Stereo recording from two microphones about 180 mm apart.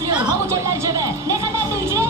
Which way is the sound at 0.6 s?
15° right (ahead or behind).